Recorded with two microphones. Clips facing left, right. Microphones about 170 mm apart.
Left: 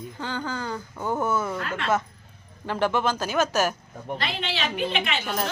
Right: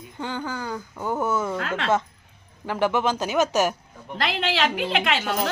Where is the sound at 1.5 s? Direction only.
90° right.